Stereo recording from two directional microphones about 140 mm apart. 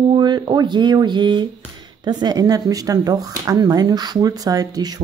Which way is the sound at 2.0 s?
30° right (ahead or behind).